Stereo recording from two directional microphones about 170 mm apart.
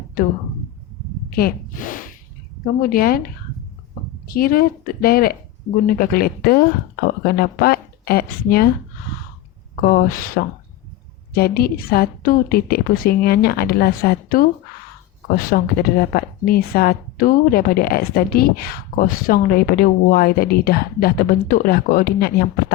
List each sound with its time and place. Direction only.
1.4 s speech: 60° left (ahead or behind)
9.9 s speech: 55° left (ahead or behind)